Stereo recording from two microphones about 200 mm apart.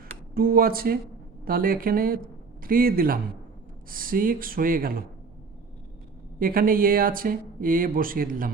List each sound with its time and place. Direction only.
0.3 s speech: 45° right (ahead or behind)
6.4 s speech: 45° right (ahead or behind)